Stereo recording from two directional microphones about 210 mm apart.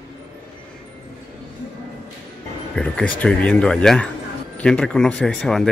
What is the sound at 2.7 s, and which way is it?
Speech, 5° left (ahead or behind).